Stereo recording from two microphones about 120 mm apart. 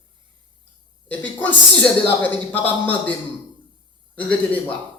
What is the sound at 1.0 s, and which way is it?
A woman's voice, 15° left (ahead or behind).